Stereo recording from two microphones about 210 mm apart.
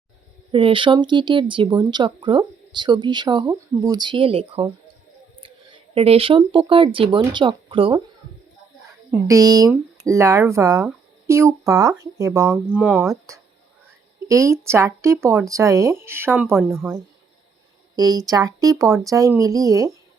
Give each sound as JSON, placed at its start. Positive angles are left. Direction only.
{"t": 0.5, "sound": "speech", "side_deg": -25}
{"t": 9.2, "sound": "speech", "side_deg": -15}